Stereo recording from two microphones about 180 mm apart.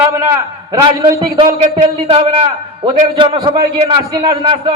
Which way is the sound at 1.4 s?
45° right (ahead or behind).